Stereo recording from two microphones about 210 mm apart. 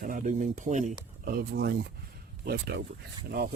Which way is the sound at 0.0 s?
40° right (ahead or behind).